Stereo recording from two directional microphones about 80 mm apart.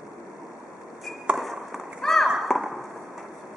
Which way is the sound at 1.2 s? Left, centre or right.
Centre.